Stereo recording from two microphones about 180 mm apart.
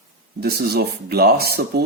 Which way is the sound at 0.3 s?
60° right (ahead or behind).